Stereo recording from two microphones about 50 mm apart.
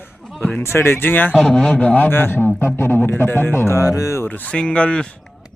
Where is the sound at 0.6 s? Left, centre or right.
Left.